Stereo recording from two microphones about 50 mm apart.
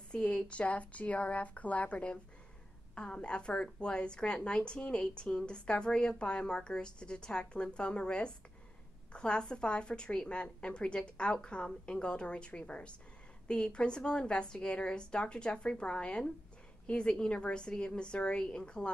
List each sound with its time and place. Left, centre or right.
0.1 s a woman's voice: centre